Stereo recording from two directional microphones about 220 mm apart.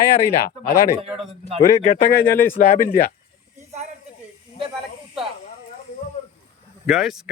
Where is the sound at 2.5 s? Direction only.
40° left (ahead or behind).